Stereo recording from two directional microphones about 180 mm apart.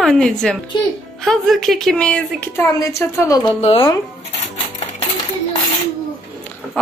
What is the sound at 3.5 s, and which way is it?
Speech, 30° left (ahead or behind).